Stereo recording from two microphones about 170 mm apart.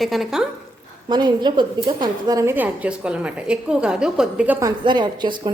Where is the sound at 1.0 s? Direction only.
25° right (ahead or behind); by 4.5 s 5° right (ahead or behind).